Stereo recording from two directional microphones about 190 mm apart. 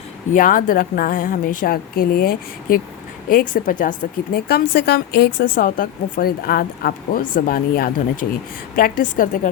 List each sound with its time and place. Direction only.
0.3 s speech: 45° left (ahead or behind)